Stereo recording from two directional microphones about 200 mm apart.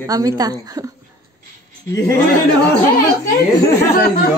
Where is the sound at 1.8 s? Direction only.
15° left (ahead or behind).